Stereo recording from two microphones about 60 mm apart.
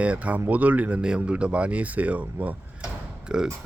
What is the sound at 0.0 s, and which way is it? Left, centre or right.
Speech, right.